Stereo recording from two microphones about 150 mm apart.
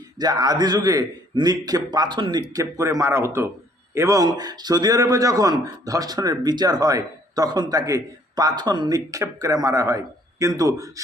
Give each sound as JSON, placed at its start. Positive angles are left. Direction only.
{"t": 0.2, "sound": "a man's voice", "side_deg": -25}